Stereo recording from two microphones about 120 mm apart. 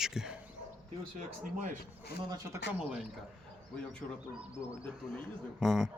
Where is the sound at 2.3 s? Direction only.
30° right (ahead or behind).